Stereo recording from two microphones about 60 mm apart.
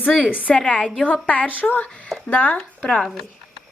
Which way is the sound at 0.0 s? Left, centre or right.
Left.